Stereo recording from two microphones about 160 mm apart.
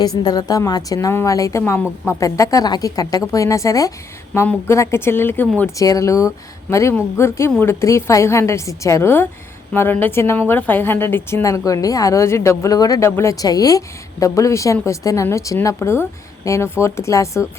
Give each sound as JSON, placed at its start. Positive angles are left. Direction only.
{"t": 0.0, "sound": "a woman's voice", "side_deg": 25}